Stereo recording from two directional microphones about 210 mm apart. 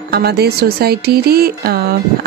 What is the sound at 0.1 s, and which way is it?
Speech, 50° right (ahead or behind).